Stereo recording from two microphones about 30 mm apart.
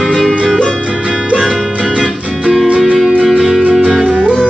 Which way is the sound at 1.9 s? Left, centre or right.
Right.